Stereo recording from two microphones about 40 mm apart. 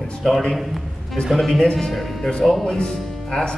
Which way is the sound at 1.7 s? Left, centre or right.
Centre.